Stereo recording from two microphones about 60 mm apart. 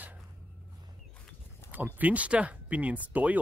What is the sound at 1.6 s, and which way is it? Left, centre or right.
Speech, right.